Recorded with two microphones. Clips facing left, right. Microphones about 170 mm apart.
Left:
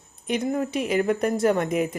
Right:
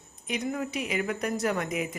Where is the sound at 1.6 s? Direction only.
50° left (ahead or behind).